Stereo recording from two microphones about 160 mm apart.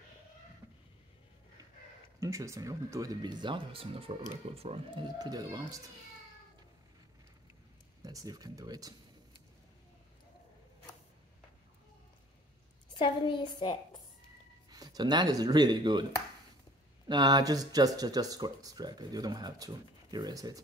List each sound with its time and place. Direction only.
2.1 s speech: 20° right (ahead or behind); by 5.0 s 40° right (ahead or behind)
5.2 s speech: 25° right (ahead or behind)
8.0 s speech: 20° right (ahead or behind)
12.9 s a woman's voice: 30° left (ahead or behind)
14.7 s speech: 25° right (ahead or behind)
17.1 s speech: 25° right (ahead or behind)